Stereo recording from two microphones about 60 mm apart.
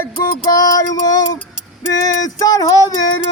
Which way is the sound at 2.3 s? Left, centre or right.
Left.